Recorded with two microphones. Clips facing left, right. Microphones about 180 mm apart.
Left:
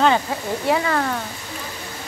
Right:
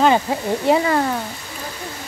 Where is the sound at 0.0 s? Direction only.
20° right (ahead or behind).